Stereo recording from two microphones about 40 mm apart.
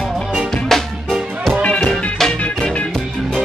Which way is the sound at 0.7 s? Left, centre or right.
Centre.